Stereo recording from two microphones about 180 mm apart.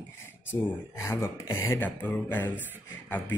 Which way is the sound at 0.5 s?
15° left (ahead or behind).